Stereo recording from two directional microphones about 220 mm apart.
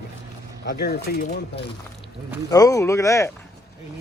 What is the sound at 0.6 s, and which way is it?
Speech, 45° left (ahead or behind).